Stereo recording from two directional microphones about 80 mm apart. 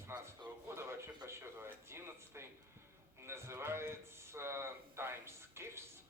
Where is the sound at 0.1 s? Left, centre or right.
Right.